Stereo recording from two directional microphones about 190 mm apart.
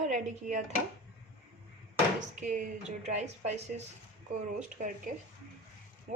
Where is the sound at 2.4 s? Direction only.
40° right (ahead or behind).